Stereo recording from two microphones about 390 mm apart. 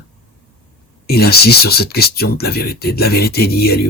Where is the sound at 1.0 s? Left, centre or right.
Left.